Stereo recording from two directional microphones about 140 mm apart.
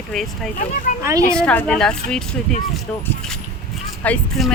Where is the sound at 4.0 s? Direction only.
10° left (ahead or behind).